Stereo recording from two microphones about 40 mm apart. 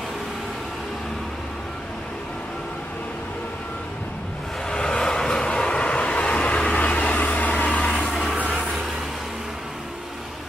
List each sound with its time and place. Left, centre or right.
4.6 s vehicle: centre; by 7.8 s left
7.8 s a sound: left
8.1 s music: centre
8.5 s vehicle: centre